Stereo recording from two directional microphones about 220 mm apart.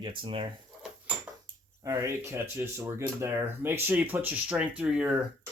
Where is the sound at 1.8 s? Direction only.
15° right (ahead or behind).